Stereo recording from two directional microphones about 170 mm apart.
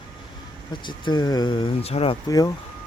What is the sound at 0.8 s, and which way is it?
Speech, 25° left (ahead or behind).